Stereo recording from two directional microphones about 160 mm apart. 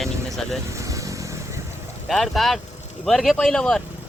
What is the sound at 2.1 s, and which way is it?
Speech, centre (ahead or behind).